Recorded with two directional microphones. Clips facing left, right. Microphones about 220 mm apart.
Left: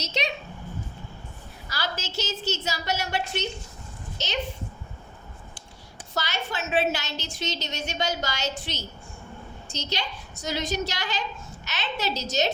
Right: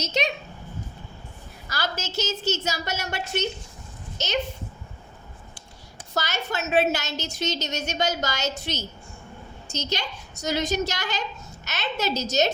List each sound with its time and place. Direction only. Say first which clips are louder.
0.0 s a woman's voice: right 4 dB; 45° right (ahead or behind)
1.7 s a woman's voice: right 2 dB; 45° right (ahead or behind)
6.1 s a woman's voice: right 2 dB; 45° right (ahead or behind)